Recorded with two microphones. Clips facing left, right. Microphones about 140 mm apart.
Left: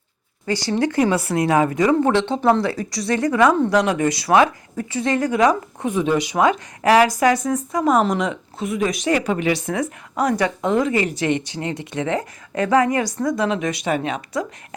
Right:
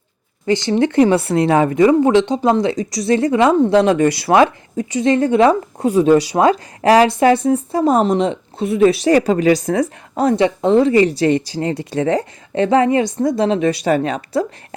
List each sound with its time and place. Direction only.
0.4 s speech: 20° right (ahead or behind); by 14.4 s 40° right (ahead or behind)